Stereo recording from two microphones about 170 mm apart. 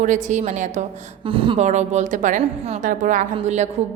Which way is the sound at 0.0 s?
45° right (ahead or behind).